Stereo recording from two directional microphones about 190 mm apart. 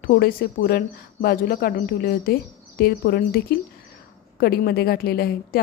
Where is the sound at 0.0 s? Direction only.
50° left (ahead or behind).